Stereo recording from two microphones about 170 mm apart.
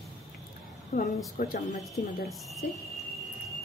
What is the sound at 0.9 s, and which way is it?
Speech, 60° left (ahead or behind).